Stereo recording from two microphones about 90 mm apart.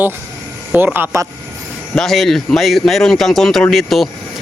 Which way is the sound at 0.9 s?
25° right (ahead or behind).